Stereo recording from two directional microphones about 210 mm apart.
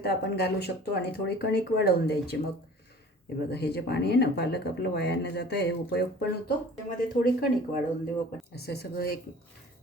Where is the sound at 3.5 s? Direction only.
50° left (ahead or behind).